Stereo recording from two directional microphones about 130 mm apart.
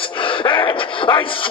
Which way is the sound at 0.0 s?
40° left (ahead or behind).